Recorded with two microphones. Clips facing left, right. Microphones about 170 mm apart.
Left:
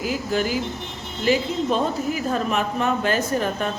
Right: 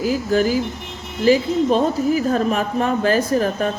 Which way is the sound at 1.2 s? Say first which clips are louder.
Right 6 dB; 40° right (ahead or behind).